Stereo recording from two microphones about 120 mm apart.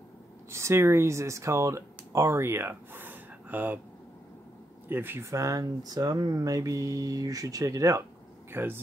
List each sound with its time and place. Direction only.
0.5 s speech: 25° right (ahead or behind)
4.8 s speech: 20° right (ahead or behind)